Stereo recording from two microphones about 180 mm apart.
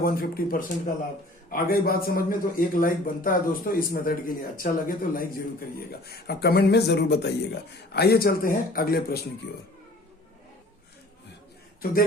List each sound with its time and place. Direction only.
0.0 s a man's voice: 55° left (ahead or behind)